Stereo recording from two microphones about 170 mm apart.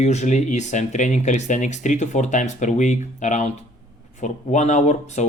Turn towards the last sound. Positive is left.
turn(degrees=45)  # may be behind; listen again after turning